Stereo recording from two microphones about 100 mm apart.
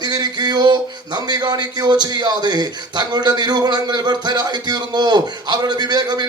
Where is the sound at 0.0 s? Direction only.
45° right (ahead or behind).